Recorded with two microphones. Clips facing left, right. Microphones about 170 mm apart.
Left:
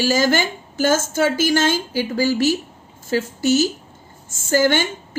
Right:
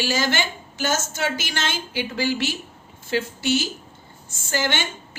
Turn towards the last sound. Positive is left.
turn(degrees=45)  # may be behind; listen again after turning